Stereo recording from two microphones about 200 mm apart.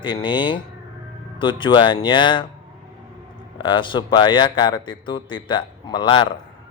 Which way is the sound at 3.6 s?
25° left (ahead or behind).